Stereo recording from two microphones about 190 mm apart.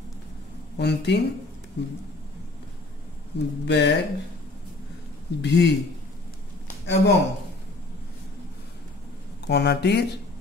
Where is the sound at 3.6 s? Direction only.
65° left (ahead or behind).